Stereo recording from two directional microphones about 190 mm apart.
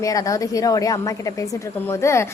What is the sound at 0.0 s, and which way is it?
A woman's voice, 20° left (ahead or behind).